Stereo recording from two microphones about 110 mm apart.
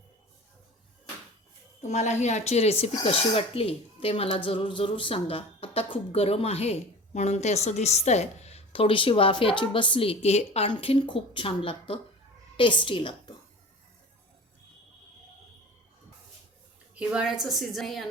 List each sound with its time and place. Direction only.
1.8 s speech: 90° left; by 4.4 s 60° left (ahead or behind)
4.4 s speech: 50° left (ahead or behind); by 10.7 s 75° left (ahead or behind)
10.7 s a woman's voice: 50° left (ahead or behind)
16.9 s speech: 10° right (ahead or behind)